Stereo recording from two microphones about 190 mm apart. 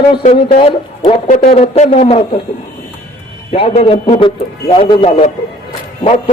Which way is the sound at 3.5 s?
30° left (ahead or behind).